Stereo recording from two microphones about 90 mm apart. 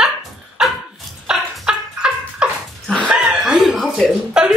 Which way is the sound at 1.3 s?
10° right (ahead or behind).